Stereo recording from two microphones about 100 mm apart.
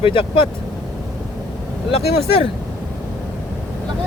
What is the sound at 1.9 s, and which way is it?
Speech, 80° left.